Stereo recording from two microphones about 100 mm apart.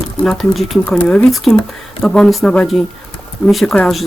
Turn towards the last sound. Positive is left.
turn(degrees=0)  # may be behind; listen again after turning